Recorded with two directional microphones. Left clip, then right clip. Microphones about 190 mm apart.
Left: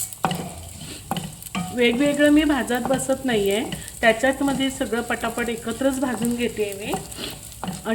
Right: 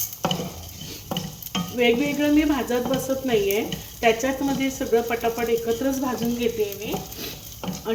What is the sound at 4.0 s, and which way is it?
Speech, 30° left (ahead or behind).